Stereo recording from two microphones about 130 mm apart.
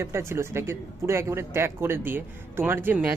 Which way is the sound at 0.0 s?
20° right (ahead or behind).